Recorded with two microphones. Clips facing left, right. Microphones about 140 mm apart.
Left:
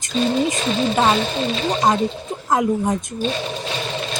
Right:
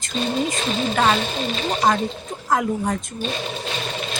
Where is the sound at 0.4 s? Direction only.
20° left (ahead or behind).